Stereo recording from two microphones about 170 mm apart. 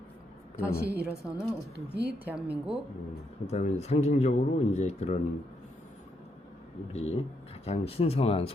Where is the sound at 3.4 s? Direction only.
40° left (ahead or behind).